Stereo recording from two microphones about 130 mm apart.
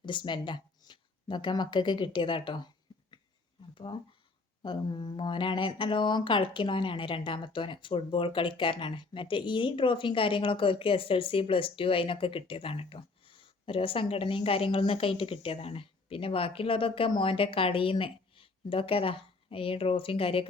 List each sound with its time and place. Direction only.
0.0 s speech: 35° left (ahead or behind)
3.9 s speech: 40° left (ahead or behind)